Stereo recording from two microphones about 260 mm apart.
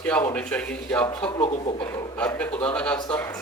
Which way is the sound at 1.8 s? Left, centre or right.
Centre.